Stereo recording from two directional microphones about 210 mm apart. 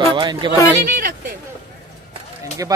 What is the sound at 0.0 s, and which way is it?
Speech, 25° right (ahead or behind).